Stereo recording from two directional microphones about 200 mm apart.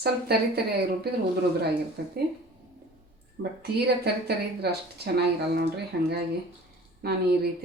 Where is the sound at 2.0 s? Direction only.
55° right (ahead or behind).